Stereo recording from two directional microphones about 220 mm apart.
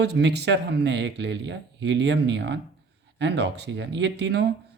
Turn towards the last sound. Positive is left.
turn(degrees=-50)  # may be behind; listen again after turning